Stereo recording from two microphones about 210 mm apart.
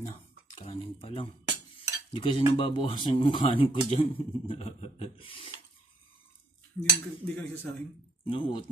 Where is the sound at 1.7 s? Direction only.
25° left (ahead or behind).